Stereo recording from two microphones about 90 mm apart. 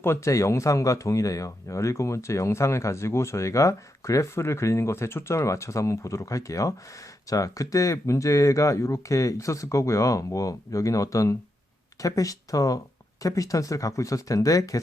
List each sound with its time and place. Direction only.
0.0 s speech: 30° left (ahead or behind)